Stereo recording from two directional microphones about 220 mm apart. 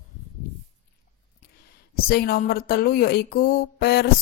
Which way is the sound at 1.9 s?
45° left (ahead or behind).